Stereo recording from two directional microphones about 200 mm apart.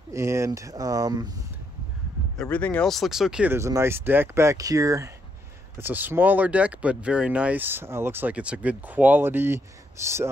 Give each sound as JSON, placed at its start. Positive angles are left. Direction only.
{"t": 0.1, "sound": "speech", "side_deg": -15}
{"t": 2.3, "sound": "speech", "side_deg": 5}